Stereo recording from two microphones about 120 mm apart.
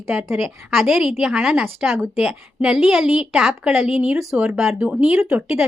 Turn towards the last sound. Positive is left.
turn(degrees=-5)  # may be behind; listen again after turning